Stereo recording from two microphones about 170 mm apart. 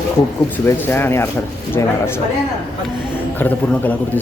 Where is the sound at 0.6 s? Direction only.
10° left (ahead or behind).